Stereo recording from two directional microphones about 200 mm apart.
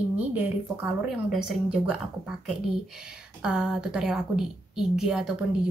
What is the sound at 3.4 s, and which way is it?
Speech, 5° right (ahead or behind).